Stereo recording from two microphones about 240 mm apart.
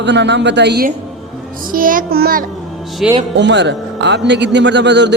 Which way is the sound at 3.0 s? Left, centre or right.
Centre.